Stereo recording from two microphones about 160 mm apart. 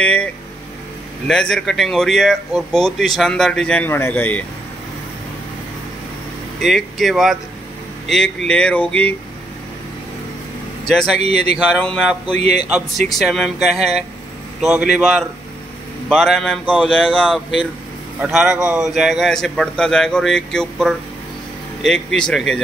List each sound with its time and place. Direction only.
0.0 s vehicle: 10° left (ahead or behind)
1.2 s speech: 5° left (ahead or behind)
6.6 s speech: centre (ahead or behind)
8.5 s a sound: 5° left (ahead or behind)
10.9 s speech: centre (ahead or behind)
11.1 s speech: 40° right (ahead or behind)
11.5 s speech: centre (ahead or behind)